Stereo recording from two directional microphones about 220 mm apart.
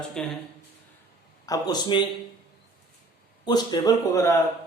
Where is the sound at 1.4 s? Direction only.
15° left (ahead or behind).